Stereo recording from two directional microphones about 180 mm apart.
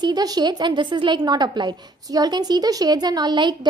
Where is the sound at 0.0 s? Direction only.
20° right (ahead or behind).